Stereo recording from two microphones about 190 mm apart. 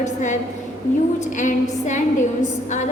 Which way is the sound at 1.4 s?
40° left (ahead or behind).